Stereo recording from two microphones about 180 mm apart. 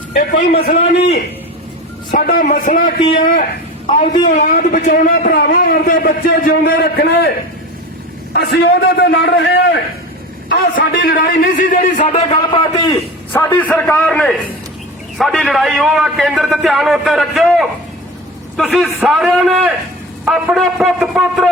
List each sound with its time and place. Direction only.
0.1 s a man's voice: 40° left (ahead or behind)
2.1 s a man's voice: 50° left (ahead or behind); by 7.3 s 65° left (ahead or behind)
8.3 s a man's voice: 70° left (ahead or behind)
10.9 s a man's voice: 55° left (ahead or behind)
12.3 s a man's voice: 25° left (ahead or behind)
13.3 s a man's voice: 10° left (ahead or behind)